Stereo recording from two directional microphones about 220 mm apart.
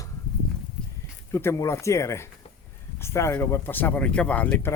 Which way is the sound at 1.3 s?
10° left (ahead or behind).